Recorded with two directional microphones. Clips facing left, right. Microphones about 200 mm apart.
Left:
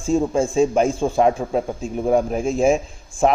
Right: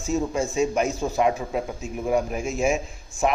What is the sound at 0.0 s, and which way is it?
Speech, 30° left (ahead or behind).